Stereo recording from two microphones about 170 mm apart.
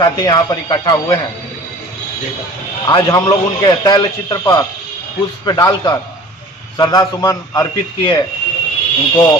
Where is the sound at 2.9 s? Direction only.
25° left (ahead or behind).